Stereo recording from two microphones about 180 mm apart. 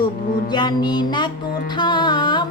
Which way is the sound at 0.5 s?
25° left (ahead or behind).